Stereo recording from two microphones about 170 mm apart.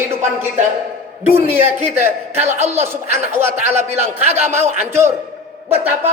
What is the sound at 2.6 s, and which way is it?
Speech, 40° right (ahead or behind).